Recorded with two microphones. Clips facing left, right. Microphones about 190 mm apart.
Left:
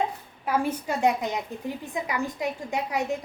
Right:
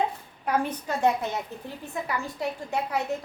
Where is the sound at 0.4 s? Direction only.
10° left (ahead or behind).